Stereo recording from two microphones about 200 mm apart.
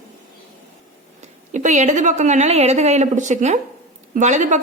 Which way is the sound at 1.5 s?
35° right (ahead or behind).